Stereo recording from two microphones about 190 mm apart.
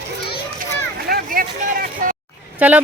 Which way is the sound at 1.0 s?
50° right (ahead or behind).